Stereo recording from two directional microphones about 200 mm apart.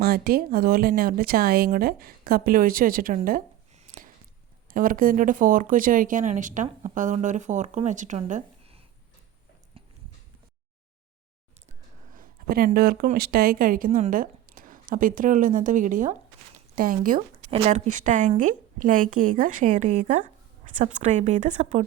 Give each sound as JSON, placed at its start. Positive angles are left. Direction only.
{"t": 0.0, "sound": "speech", "side_deg": -50}
{"t": 3.2, "sound": "a sound", "side_deg": -40}
{"t": 4.7, "sound": "speech", "side_deg": -45}
{"t": 9.7, "sound": "horse", "side_deg": -30}
{"t": 12.1, "sound": "speech", "side_deg": -45}